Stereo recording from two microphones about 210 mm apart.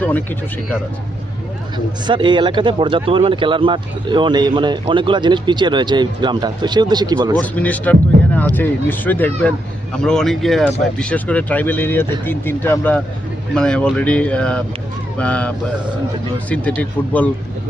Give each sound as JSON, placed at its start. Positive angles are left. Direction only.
{"t": 0.0, "sound": "speech", "side_deg": 10}
{"t": 2.0, "sound": "speech", "side_deg": -20}
{"t": 7.3, "sound": "speech", "side_deg": 5}